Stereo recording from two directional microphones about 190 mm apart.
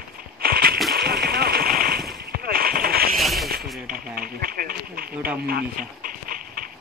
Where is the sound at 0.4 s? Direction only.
55° right (ahead or behind).